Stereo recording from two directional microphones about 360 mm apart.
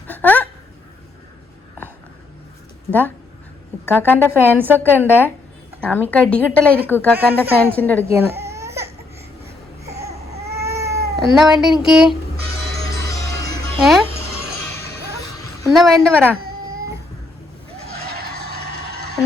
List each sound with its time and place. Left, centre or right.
0.1 s a sound: centre
3.8 s speech: centre
7.3 s speech: centre
7.9 s baby cry: centre
13.7 s music: centre
15.6 s speech: centre
17.7 s neigh: right